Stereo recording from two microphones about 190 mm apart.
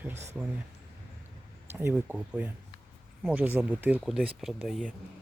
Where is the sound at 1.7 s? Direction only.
10° right (ahead or behind).